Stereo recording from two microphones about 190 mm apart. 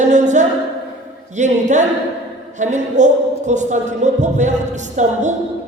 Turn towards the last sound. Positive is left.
turn(degrees=-40)  # may be behind; listen again after turning